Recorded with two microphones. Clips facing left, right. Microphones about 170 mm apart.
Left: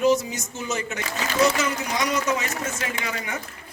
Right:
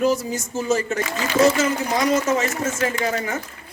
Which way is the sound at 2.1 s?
30° right (ahead or behind).